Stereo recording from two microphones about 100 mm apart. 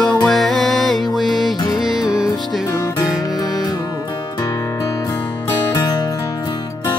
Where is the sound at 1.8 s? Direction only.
5° right (ahead or behind).